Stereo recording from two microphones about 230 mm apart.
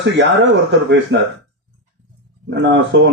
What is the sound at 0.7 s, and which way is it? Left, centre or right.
Speech, right.